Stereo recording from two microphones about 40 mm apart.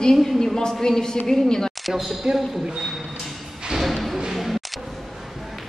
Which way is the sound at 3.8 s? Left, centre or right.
Centre.